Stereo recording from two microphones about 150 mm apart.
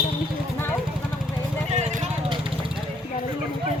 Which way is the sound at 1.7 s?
50° right (ahead or behind).